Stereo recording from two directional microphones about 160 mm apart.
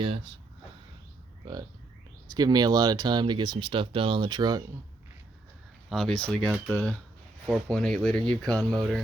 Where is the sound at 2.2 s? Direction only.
25° right (ahead or behind).